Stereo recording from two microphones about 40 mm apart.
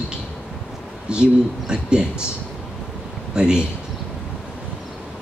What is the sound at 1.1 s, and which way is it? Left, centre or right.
Speech, right.